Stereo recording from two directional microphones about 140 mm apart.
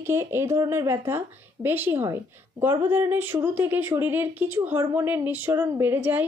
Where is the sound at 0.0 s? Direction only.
20° right (ahead or behind).